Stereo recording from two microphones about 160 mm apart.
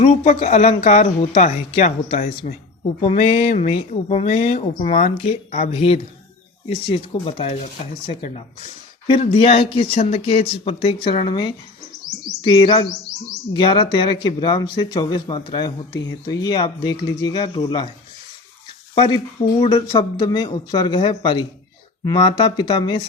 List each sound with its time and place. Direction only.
0.0 s speech: 45° left (ahead or behind)
2.1 s speech: 60° left (ahead or behind)
3.0 s speech: 45° left (ahead or behind)
9.0 s speech: 35° left (ahead or behind)
19.1 s speech: 35° left (ahead or behind)